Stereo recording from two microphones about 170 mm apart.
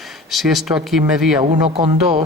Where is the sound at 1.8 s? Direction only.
35° right (ahead or behind).